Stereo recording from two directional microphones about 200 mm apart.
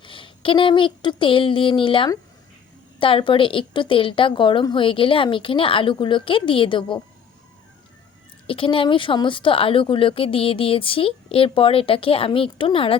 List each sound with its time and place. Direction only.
0.0 s speech: 25° left (ahead or behind)
8.4 s speech: 25° left (ahead or behind)